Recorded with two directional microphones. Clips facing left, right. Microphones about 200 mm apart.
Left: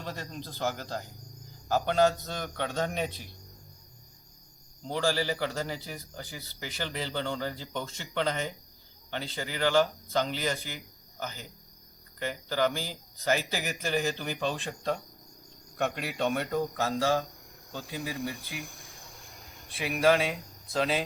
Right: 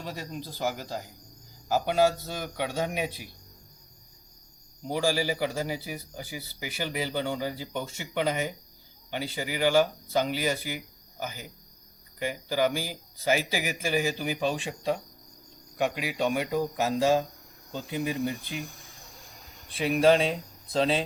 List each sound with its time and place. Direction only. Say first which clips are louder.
0.0 s a man's voice: right 2 dB; 10° right (ahead or behind)
4.8 s a man's voice: right 2 dB; 10° right (ahead or behind)
19.7 s speech: right 3 dB; 30° right (ahead or behind)